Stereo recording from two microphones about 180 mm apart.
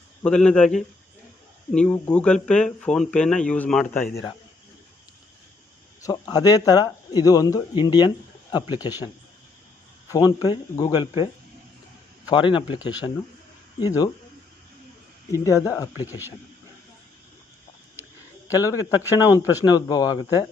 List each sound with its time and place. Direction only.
0.2 s speech: 5° left (ahead or behind)
6.0 s speech: 20° left (ahead or behind)
10.1 s speech: 20° left (ahead or behind)
12.3 s speech: 25° left (ahead or behind)
15.3 s speech: 20° left (ahead or behind)
16.0 s speech: 10° right (ahead or behind)
18.4 s speech: 20° left (ahead or behind)